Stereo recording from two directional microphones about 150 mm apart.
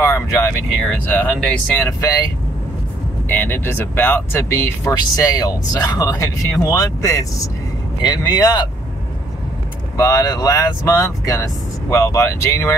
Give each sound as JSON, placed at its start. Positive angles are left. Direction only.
{"t": 0.0, "sound": "speech", "side_deg": 15}
{"t": 3.3, "sound": "speech", "side_deg": 15}
{"t": 9.9, "sound": "speech", "side_deg": 20}